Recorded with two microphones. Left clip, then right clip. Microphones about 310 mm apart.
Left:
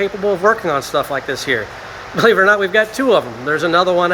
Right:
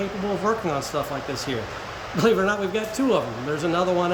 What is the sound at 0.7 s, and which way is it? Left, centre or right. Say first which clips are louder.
Speech: left 9 dB; centre.